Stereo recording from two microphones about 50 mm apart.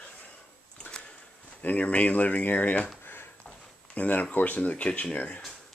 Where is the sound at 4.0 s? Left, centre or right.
Left.